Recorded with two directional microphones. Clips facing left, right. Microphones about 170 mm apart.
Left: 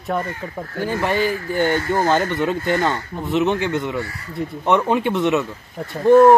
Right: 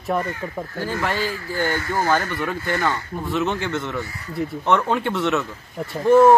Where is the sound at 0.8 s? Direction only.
20° left (ahead or behind).